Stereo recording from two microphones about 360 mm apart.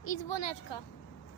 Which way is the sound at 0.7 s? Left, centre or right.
Left.